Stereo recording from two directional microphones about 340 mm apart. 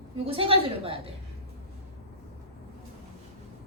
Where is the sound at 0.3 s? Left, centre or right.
Centre.